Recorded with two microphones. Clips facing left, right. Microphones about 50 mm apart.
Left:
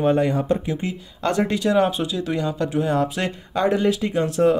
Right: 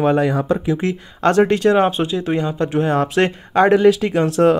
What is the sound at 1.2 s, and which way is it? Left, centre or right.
Speech, right.